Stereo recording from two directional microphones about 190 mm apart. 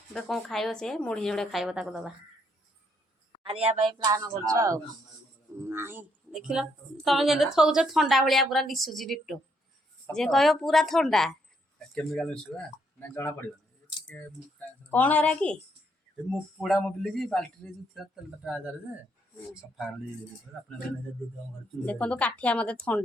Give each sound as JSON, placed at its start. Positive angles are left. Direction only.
{"t": 0.1, "sound": "a woman's voice", "side_deg": 0}
{"t": 3.4, "sound": "speech", "side_deg": -30}
{"t": 3.9, "sound": "a woman's voice", "side_deg": -20}
{"t": 14.8, "sound": "a woman's voice", "side_deg": 10}
{"t": 21.8, "sound": "a woman's voice", "side_deg": 5}